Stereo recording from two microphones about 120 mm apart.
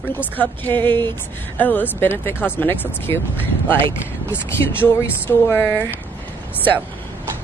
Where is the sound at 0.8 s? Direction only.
40° right (ahead or behind).